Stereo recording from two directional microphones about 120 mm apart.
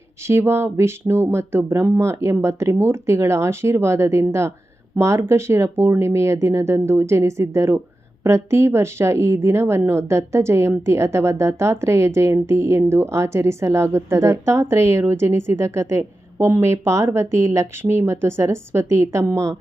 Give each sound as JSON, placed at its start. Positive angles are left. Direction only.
{"t": 0.3, "sound": "speech", "side_deg": -20}